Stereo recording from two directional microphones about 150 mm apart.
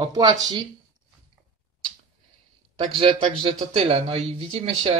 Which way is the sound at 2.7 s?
35° right (ahead or behind).